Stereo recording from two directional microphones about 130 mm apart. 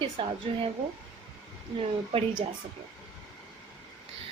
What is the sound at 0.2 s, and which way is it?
Speech, 40° right (ahead or behind).